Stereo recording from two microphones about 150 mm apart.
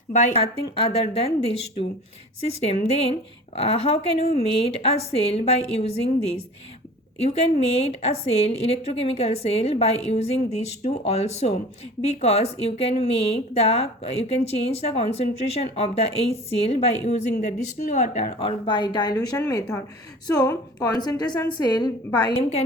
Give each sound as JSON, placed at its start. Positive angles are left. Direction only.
{"t": 0.1, "sound": "speech", "side_deg": 45}
{"t": 18.3, "sound": "speech", "side_deg": 35}
{"t": 22.4, "sound": "speech", "side_deg": 45}